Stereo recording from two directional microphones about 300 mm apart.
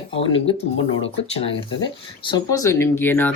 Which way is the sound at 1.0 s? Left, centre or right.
Centre.